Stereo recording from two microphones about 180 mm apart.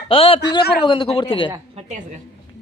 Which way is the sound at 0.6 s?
60° left (ahead or behind).